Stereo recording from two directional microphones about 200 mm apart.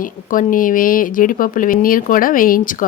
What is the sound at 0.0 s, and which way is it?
A woman's voice, 40° left (ahead or behind).